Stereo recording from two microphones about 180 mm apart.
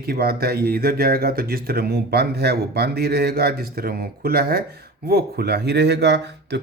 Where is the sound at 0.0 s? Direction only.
60° right (ahead or behind).